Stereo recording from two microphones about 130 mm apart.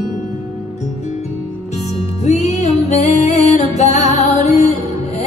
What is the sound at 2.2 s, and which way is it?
Music, 60° left (ahead or behind).